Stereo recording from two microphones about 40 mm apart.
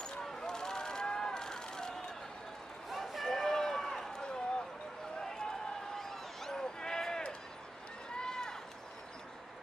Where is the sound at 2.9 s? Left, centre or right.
Centre.